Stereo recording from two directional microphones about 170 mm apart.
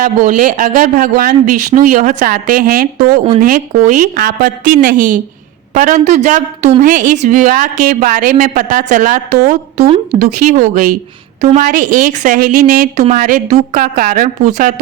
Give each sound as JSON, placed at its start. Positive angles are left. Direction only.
{"t": 0.0, "sound": "a woman's voice", "side_deg": -50}
{"t": 10.4, "sound": "a woman's voice", "side_deg": -55}